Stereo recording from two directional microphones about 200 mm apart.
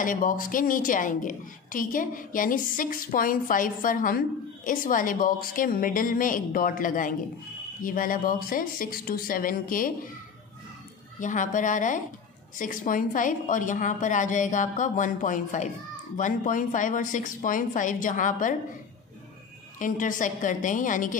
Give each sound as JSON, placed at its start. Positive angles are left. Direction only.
{"t": 0.0, "sound": "a woman's voice", "side_deg": 40}
{"t": 11.1, "sound": "a woman's voice", "side_deg": 40}
{"t": 19.8, "sound": "a woman's voice", "side_deg": 40}